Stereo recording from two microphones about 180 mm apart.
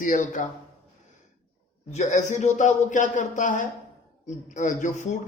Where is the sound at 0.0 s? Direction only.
45° left (ahead or behind).